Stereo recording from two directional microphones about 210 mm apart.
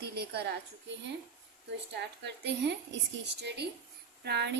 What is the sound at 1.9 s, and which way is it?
A woman's voice, 55° right (ahead or behind).